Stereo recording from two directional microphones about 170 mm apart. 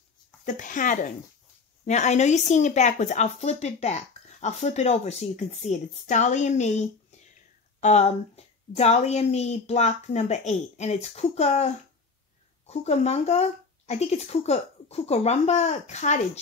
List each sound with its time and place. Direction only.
0.5 s a woman's voice: 50° left (ahead or behind)